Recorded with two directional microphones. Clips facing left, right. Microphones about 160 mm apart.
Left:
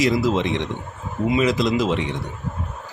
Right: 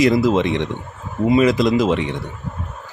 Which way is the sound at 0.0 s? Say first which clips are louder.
Right 4 dB; 50° right (ahead or behind).